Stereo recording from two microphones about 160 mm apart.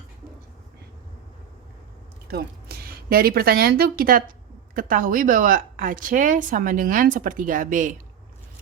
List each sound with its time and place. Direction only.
2.2 s speech: 75° right (ahead or behind); by 7.9 s 55° right (ahead or behind)